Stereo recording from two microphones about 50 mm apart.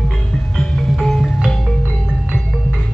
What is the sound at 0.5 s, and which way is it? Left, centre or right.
Music, centre.